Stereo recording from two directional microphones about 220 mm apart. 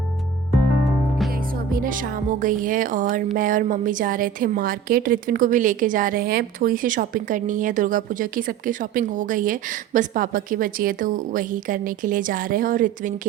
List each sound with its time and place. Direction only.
1.7 s a woman's voice: 40° right (ahead or behind)